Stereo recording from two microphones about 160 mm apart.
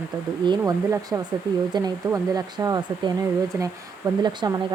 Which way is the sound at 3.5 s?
15° right (ahead or behind).